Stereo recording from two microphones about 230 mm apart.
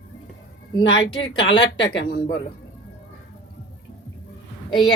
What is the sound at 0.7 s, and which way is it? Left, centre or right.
Speech, centre.